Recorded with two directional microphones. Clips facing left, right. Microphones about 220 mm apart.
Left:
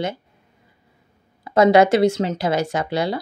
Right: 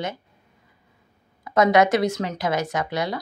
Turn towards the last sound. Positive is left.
turn(degrees=30)  # may be behind; listen again after turning